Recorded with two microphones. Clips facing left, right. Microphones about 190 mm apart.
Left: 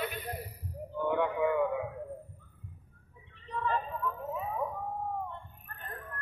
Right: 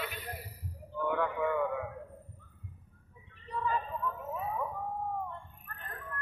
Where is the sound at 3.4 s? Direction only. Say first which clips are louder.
Even; 10° right (ahead or behind).